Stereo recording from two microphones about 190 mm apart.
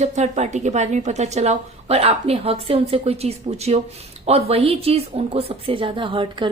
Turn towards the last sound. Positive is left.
turn(degrees=-25)  # may be behind; listen again after turning